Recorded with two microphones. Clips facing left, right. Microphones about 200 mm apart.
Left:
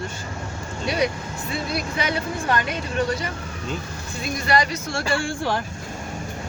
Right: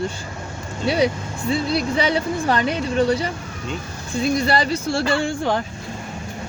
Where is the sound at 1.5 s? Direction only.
30° right (ahead or behind).